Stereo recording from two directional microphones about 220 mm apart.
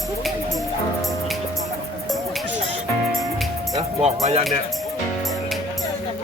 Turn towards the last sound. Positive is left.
turn(degrees=-30)  # may be behind; listen again after turning